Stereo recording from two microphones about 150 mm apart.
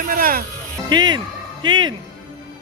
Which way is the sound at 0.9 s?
30° right (ahead or behind).